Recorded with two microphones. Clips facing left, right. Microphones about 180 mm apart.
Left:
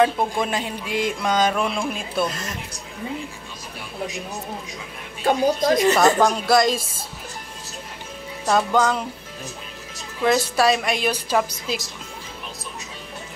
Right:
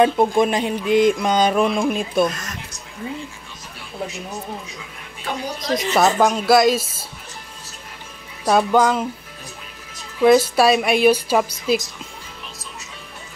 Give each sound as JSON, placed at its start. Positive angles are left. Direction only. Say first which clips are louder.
{"t": 0.0, "sound": "a sound", "louder": "right 4 dB", "side_deg": -20}
{"t": 5.2, "sound": "speech", "louder": "left 9 dB", "side_deg": 50}
{"t": 5.9, "sound": "speech", "louder": "right 1 dB", "side_deg": -5}
{"t": 8.5, "sound": "a woman's voice", "louder": "right 3 dB", "side_deg": -10}
{"t": 10.2, "sound": "a woman's voice", "louder": "right 5 dB", "side_deg": -10}